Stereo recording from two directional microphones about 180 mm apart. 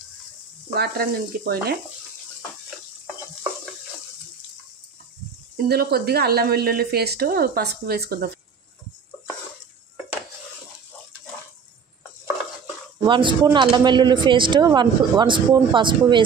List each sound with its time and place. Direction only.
0.7 s a woman's voice: 60° right (ahead or behind)
5.7 s a woman's voice: 60° right (ahead or behind)
13.0 s speech: 25° right (ahead or behind)